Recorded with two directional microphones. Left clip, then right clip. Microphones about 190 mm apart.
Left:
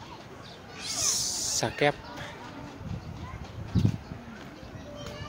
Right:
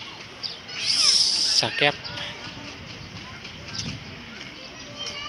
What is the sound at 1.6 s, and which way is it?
Speech, 20° left (ahead or behind).